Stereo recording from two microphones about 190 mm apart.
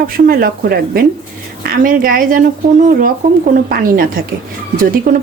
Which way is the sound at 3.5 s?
50° right (ahead or behind).